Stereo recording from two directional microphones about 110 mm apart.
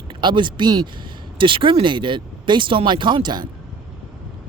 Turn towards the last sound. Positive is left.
turn(degrees=-40)  # may be behind; listen again after turning